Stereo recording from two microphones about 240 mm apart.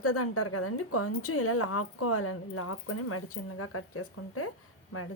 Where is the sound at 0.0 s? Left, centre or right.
Left.